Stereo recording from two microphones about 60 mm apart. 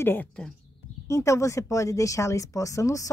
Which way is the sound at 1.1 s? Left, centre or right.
Left.